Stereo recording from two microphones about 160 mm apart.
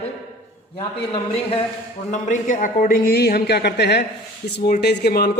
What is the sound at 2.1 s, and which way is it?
A man's voice, 50° left (ahead or behind).